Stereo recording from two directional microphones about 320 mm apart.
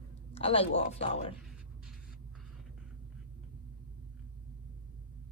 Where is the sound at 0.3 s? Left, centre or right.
Centre.